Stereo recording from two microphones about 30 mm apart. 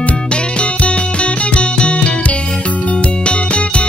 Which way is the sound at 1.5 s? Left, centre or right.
Left.